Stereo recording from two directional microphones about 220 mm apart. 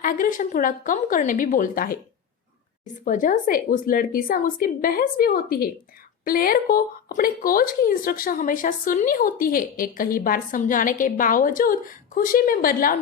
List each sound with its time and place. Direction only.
0.0 s speech: 40° left (ahead or behind)